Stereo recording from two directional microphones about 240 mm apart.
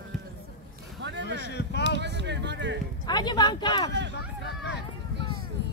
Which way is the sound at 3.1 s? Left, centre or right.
Centre.